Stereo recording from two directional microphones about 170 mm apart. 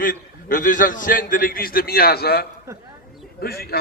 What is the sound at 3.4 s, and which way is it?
Speech, 65° left (ahead or behind).